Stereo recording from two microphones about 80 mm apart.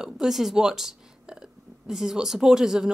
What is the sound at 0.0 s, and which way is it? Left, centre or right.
A woman's voice, centre.